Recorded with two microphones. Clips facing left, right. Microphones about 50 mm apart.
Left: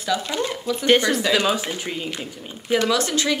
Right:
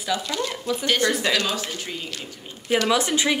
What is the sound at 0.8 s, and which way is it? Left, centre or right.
Speech, left.